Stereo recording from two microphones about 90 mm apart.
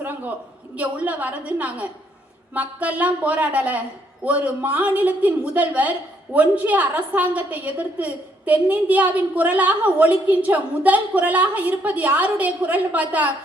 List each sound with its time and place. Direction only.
0.8 s a woman's voice: 15° right (ahead or behind)